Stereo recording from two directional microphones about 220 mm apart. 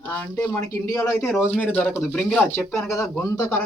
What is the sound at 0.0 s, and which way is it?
Speech, 10° left (ahead or behind).